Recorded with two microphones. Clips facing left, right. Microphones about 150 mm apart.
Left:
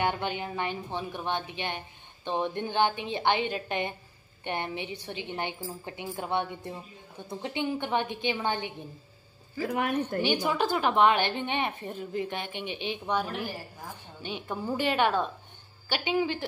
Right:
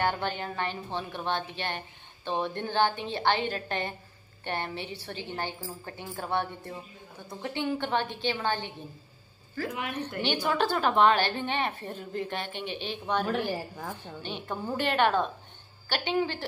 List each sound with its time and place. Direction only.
0.0 s a woman's voice: 15° left (ahead or behind)
9.7 s a woman's voice: 50° left (ahead or behind)
10.2 s a woman's voice: 15° left (ahead or behind)
14.2 s a woman's voice: 10° left (ahead or behind)